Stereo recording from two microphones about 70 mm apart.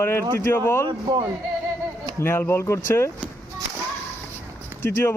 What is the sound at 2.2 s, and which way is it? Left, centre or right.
Speech, left.